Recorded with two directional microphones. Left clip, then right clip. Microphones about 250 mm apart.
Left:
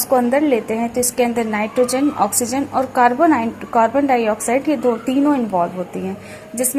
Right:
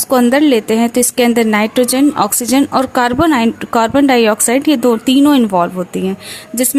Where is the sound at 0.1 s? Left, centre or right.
Right.